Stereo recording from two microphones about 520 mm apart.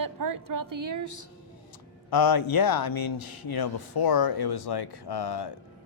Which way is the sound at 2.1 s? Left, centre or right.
Left.